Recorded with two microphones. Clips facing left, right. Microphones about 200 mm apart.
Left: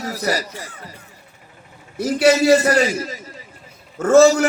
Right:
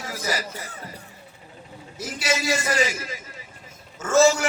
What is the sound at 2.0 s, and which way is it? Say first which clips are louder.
Speech: left 13 dB; 60° left (ahead or behind).